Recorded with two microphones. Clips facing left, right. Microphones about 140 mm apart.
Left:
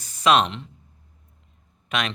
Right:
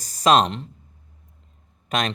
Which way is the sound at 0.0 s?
40° right (ahead or behind).